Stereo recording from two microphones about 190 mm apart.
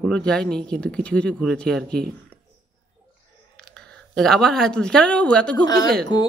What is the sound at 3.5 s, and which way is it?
A woman's voice, 5° left (ahead or behind).